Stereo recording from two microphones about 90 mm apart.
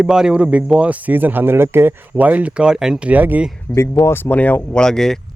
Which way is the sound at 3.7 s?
25° left (ahead or behind).